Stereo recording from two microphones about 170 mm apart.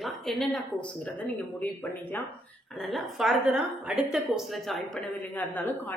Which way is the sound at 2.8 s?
Centre (ahead or behind).